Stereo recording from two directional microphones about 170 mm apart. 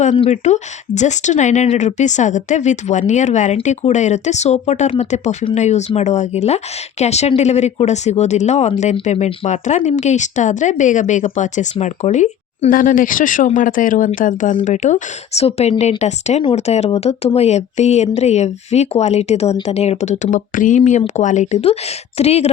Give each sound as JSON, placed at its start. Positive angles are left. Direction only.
{"t": 0.2, "sound": "speech", "side_deg": 40}